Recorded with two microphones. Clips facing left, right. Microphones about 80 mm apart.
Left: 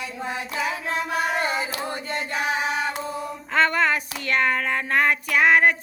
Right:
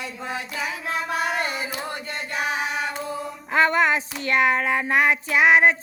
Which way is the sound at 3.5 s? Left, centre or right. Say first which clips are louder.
Right 1 dB; centre.